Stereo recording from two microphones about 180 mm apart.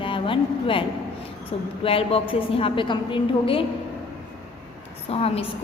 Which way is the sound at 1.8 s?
30° left (ahead or behind).